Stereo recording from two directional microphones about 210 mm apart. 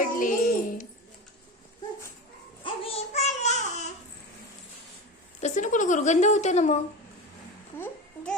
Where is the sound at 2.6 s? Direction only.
25° left (ahead or behind).